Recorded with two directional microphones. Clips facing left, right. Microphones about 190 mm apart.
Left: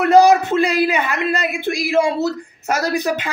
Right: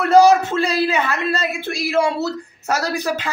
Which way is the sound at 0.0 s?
15° left (ahead or behind).